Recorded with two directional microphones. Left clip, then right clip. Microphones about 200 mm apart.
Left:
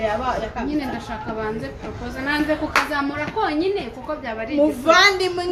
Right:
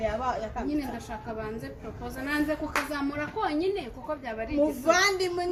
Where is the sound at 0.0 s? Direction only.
45° right (ahead or behind).